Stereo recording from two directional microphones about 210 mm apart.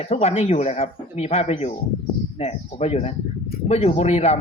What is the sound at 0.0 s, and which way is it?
Speech, 30° left (ahead or behind).